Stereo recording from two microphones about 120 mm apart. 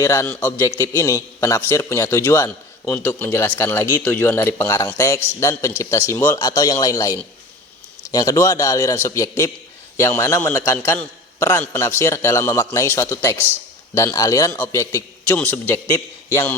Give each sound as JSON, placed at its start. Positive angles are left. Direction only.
{"t": 0.0, "sound": "a man's voice", "side_deg": 25}
{"t": 15.3, "sound": "a man's voice", "side_deg": 15}